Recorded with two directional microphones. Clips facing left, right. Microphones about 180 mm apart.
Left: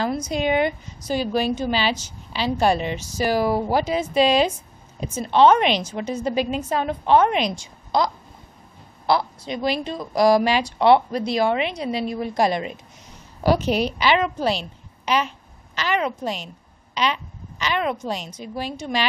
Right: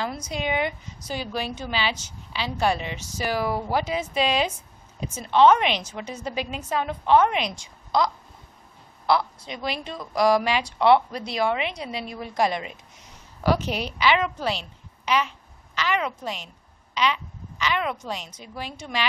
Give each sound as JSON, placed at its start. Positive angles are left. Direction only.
{"t": 0.0, "sound": "a woman's voice", "side_deg": 40}
{"t": 9.0, "sound": "a woman's voice", "side_deg": 35}